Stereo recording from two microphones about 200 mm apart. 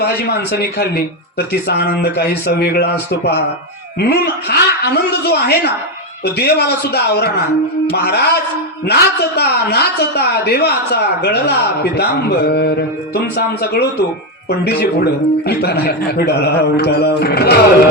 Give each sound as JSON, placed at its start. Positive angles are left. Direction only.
{"t": 0.0, "sound": "a man's voice", "side_deg": 50}